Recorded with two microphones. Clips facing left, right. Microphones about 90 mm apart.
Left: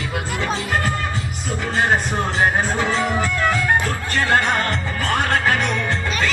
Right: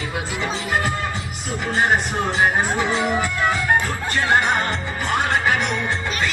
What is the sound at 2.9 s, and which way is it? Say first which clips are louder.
Music: left 1 dB; 15° right (ahead or behind).